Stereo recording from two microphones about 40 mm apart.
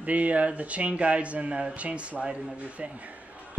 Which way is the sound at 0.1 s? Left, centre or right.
Right.